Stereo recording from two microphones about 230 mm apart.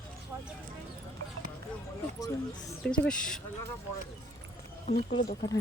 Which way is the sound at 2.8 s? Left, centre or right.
Centre.